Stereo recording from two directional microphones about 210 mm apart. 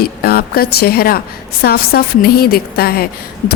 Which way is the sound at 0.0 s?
45° left (ahead or behind).